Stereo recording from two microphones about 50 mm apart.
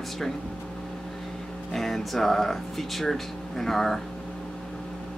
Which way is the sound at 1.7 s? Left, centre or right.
Centre.